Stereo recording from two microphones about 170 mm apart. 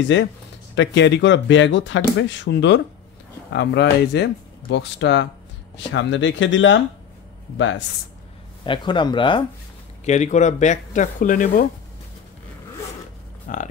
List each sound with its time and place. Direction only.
0.0 s speech: 90° left
8.6 s speech: 30° left (ahead or behind)
10.0 s speech: 45° left (ahead or behind)
13.5 s speech: 50° left (ahead or behind)